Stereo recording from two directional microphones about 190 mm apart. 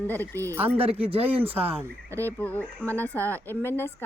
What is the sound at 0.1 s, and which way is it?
Speech, 10° left (ahead or behind).